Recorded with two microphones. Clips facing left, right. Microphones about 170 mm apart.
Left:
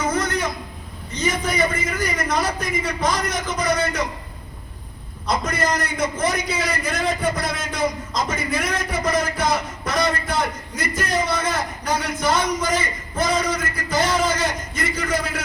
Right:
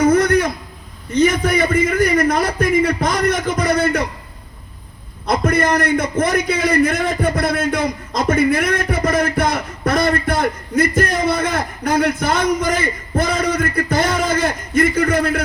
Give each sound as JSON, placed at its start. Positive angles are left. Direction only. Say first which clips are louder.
{"t": 0.0, "sound": "a sound", "louder": "right 9 dB", "side_deg": -60}
{"t": 1.1, "sound": "a man's voice", "louder": "right 8 dB", "side_deg": -60}
{"t": 5.2, "sound": "a man's voice", "louder": "right 6 dB", "side_deg": -60}